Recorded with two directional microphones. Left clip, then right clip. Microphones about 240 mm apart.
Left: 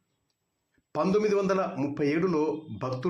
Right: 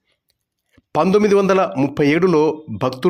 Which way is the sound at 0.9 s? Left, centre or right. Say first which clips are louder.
Right 11 dB; right.